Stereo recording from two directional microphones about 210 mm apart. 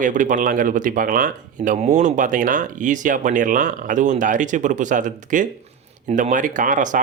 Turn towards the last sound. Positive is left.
turn(degrees=-40)  # may be behind; listen again after turning